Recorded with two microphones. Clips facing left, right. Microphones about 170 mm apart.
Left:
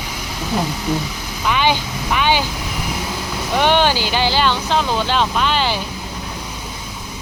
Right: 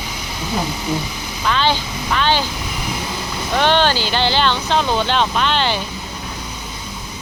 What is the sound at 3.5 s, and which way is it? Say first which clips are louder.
Speech: even; 10° left (ahead or behind).